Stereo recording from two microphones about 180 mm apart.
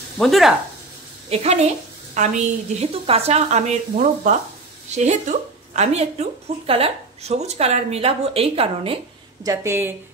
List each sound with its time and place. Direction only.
0.2 s speech: centre (ahead or behind)
1.3 s a woman's voice: 35° right (ahead or behind)
9.5 s speech: 15° right (ahead or behind)